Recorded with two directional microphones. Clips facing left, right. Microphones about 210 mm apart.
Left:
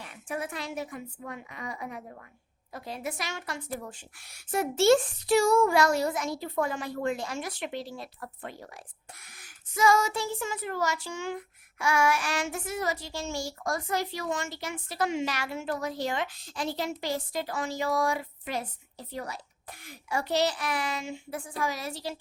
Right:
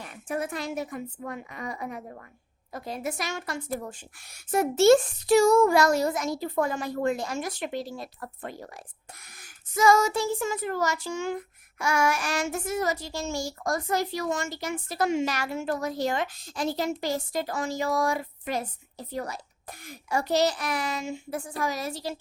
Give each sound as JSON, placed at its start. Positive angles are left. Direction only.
{"t": 0.0, "sound": "speech", "side_deg": -45}